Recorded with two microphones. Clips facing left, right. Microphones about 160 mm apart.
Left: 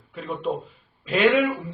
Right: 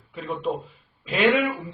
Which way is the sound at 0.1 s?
Centre (ahead or behind).